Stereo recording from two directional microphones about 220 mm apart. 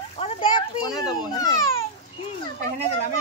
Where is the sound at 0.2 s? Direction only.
25° left (ahead or behind).